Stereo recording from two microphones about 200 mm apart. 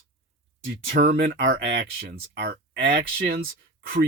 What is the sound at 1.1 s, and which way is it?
Speech, 45° right (ahead or behind).